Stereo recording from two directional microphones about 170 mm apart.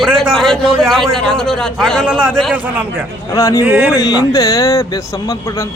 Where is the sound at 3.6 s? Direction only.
10° right (ahead or behind).